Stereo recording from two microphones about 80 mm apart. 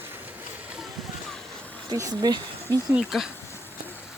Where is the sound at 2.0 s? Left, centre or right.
Right.